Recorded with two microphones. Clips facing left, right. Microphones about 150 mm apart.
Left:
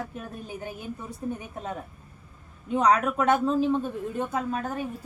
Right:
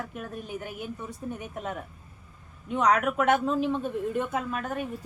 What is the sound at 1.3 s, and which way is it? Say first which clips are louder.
Speech: right 1 dB; 30° left (ahead or behind).